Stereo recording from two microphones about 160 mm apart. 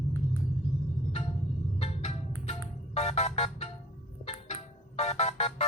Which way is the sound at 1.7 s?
40° left (ahead or behind).